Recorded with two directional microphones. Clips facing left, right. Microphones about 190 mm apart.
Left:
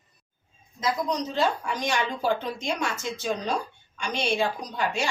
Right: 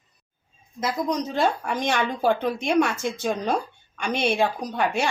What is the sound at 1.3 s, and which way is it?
Speech, 55° right (ahead or behind).